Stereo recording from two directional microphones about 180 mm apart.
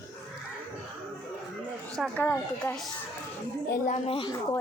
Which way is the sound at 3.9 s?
30° left (ahead or behind).